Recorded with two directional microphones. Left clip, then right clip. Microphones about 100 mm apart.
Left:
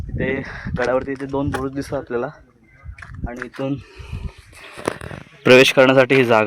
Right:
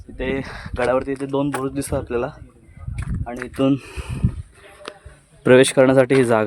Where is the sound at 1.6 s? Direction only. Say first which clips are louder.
Right 1 dB; 15° left (ahead or behind).